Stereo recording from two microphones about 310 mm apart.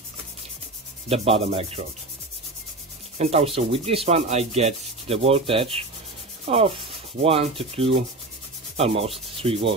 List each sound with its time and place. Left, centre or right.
1.0 s sanding: centre
3.2 s sanding: centre